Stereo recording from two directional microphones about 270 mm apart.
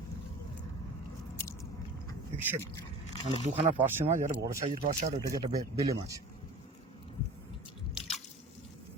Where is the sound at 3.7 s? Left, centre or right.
Centre.